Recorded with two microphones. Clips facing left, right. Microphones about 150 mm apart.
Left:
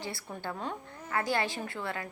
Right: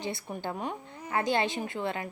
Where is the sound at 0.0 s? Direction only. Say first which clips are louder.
Right 4 dB; 20° right (ahead or behind).